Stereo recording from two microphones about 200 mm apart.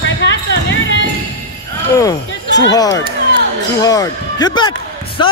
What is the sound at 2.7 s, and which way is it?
Speech, 15° left (ahead or behind).